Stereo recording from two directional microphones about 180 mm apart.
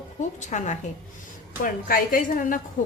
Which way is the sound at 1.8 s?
50° left (ahead or behind).